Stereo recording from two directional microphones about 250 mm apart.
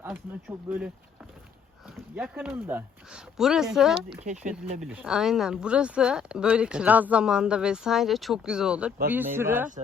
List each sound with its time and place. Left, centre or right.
0.0 s speech: centre
2.1 s speech: centre
4.2 s speech: right
4.8 s speech: centre